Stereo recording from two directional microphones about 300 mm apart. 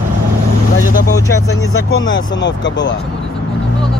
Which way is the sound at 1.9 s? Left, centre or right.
Left.